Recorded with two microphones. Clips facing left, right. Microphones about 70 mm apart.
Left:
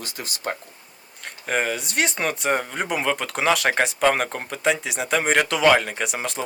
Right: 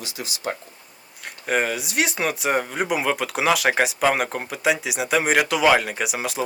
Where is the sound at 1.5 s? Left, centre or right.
Centre.